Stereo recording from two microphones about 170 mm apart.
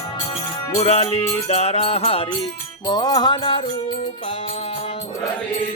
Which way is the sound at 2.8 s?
25° left (ahead or behind).